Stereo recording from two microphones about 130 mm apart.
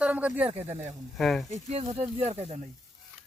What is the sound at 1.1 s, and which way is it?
Speech, 5° left (ahead or behind).